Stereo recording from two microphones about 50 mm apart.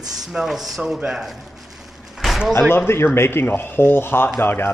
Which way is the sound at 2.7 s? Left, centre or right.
Left.